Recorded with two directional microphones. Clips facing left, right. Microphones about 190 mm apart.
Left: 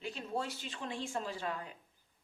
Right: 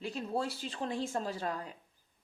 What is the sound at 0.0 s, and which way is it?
Speech, 35° right (ahead or behind).